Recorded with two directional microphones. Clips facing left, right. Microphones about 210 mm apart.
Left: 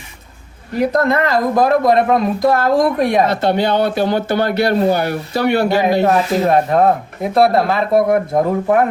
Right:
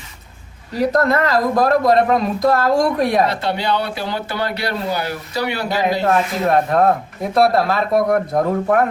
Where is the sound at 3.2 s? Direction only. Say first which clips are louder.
Left 5 dB; 50° left (ahead or behind).